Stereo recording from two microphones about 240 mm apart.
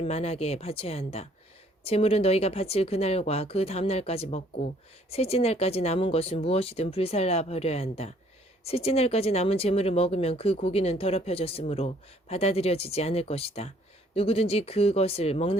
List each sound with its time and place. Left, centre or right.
0.0 s speech: left